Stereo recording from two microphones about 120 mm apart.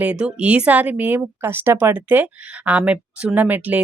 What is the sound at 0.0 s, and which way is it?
Speech, 10° right (ahead or behind).